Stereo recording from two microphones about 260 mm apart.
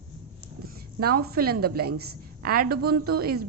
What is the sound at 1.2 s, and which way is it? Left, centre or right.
A woman's voice, right.